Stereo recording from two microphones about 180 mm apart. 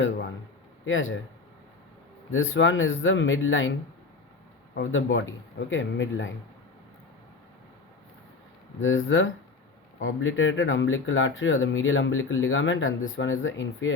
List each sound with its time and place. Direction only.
0.9 s speech: 90° left
2.3 s speech: 90° left
4.7 s speech: 90° left
8.8 s speech: 90° left